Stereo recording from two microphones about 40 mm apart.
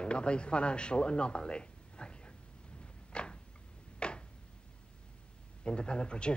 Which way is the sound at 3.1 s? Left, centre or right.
Left.